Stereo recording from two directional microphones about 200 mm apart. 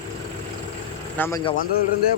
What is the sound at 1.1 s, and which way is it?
Speech, 10° left (ahead or behind).